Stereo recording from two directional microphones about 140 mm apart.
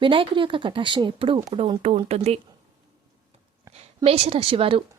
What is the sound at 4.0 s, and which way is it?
Speech, 45° right (ahead or behind).